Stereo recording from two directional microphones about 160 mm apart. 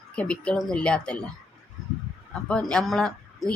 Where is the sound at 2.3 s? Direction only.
5° left (ahead or behind).